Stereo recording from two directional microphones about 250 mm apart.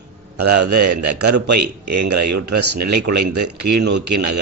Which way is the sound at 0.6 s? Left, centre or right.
Right.